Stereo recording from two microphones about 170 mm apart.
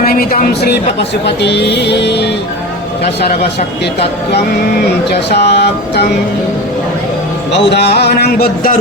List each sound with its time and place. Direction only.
0.0 s speech: 60° left (ahead or behind)
1.4 s music: 90° left
3.0 s speech: 70° left (ahead or behind)
5.0 s speech: 75° left (ahead or behind)
7.5 s speech: 80° left; by 8.7 s 65° left (ahead or behind)